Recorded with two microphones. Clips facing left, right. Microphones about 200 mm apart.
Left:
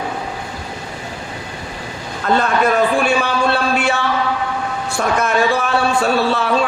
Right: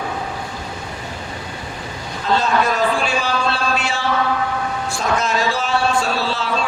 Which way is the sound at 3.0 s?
60° left (ahead or behind).